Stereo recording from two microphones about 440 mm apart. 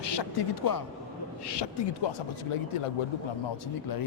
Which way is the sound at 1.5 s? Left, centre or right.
Left.